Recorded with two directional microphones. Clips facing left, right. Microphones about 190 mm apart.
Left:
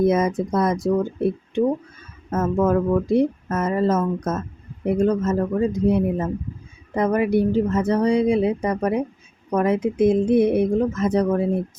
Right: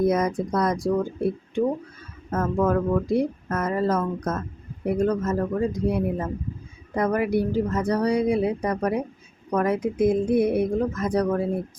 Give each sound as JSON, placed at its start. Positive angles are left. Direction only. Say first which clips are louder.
{"t": 0.0, "sound": "a woman's voice", "louder": "left 3 dB", "side_deg": 25}